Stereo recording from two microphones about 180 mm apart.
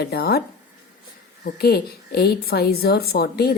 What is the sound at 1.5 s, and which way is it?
A woman's voice, 60° left (ahead or behind).